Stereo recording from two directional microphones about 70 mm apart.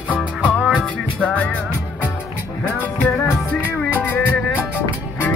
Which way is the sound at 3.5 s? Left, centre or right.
Left.